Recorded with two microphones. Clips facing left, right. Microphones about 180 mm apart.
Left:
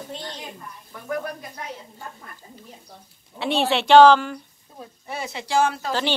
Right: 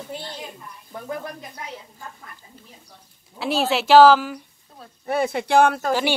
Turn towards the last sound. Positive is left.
turn(degrees=-55)  # may be behind; listen again after turning